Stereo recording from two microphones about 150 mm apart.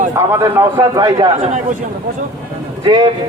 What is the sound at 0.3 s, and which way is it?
Speech, 25° right (ahead or behind).